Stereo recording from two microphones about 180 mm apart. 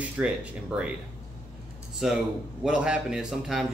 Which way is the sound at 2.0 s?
5° right (ahead or behind).